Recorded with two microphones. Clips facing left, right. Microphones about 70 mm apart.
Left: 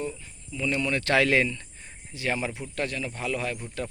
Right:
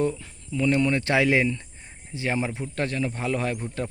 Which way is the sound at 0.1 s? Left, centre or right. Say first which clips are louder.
Right 7 dB; right.